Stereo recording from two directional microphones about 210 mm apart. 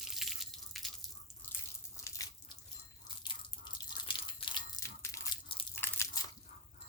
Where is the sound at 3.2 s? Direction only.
20° left (ahead or behind).